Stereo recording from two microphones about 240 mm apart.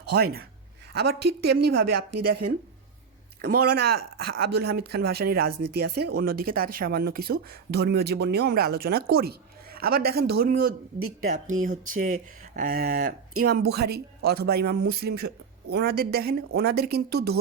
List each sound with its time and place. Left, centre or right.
0.0 s speech: right
2.0 s speech: right
3.4 s speech: right
5.9 s speech: right
6.1 s speech: right